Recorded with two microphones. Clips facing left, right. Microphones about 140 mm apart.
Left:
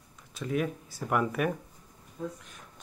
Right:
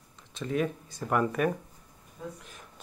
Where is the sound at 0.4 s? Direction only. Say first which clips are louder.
Right 1 dB; 5° left (ahead or behind).